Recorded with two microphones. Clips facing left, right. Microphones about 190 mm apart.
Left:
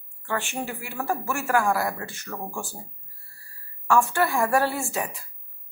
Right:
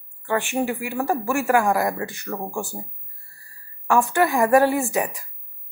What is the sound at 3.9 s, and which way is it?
A woman's voice, 15° right (ahead or behind).